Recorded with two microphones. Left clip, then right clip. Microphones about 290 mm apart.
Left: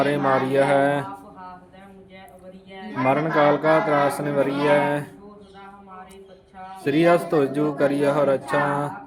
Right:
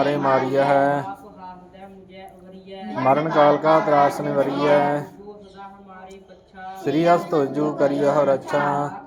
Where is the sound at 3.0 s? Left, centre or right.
Centre.